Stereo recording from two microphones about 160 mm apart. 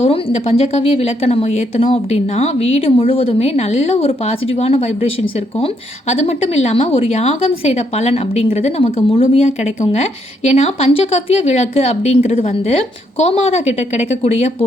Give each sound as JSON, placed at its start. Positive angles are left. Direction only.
{"t": 0.0, "sound": "speech", "side_deg": 40}